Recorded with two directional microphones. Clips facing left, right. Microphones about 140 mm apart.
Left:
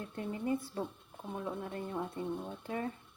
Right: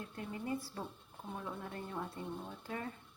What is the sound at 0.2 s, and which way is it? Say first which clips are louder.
Speech: left 6 dB; 25° left (ahead or behind).